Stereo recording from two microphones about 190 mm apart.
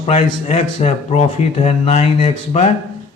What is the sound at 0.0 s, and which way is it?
Speech, 30° left (ahead or behind).